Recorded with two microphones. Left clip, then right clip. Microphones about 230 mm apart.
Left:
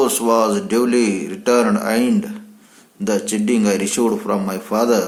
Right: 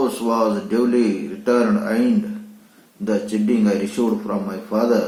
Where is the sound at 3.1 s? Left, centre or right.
Left.